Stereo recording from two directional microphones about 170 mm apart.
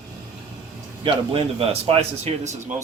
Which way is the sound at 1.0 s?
35° right (ahead or behind).